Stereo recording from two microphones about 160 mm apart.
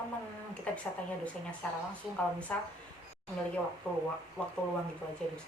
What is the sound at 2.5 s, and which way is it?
Speech, 10° left (ahead or behind).